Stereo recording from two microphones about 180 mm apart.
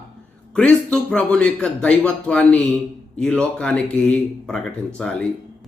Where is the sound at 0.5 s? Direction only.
5° left (ahead or behind).